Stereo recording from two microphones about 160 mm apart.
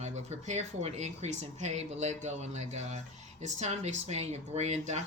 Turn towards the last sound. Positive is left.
turn(degrees=-45)  # may be behind; listen again after turning